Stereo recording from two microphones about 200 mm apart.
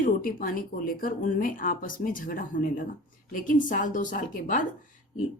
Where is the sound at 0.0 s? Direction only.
45° left (ahead or behind).